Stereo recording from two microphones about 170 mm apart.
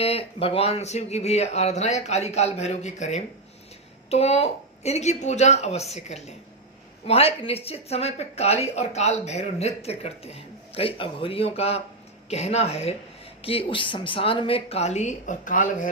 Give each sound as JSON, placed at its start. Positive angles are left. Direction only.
{"t": 0.0, "sound": "speech", "side_deg": 35}